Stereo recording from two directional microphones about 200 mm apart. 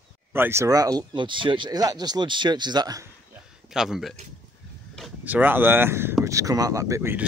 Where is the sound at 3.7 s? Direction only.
Centre (ahead or behind).